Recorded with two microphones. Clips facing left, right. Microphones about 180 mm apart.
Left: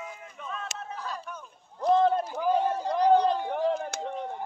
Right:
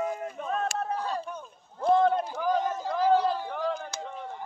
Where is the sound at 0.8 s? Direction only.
35° right (ahead or behind).